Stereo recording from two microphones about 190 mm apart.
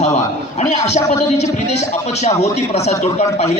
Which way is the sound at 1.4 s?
35° left (ahead or behind).